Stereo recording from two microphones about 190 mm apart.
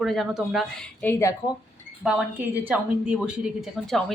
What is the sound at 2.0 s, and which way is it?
A woman's voice, 5° right (ahead or behind).